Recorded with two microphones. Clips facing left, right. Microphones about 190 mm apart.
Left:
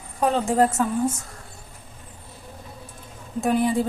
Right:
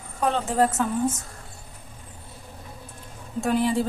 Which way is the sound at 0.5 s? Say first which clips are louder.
Left 2 dB; 10° left (ahead or behind).